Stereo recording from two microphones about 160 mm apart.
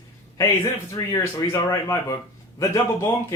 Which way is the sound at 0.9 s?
20° left (ahead or behind).